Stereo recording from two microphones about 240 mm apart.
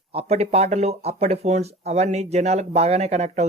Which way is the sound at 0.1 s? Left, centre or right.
Right.